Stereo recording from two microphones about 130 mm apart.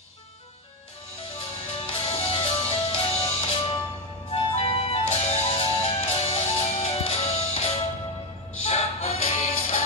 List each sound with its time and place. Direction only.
1.9 s music: 45° left (ahead or behind)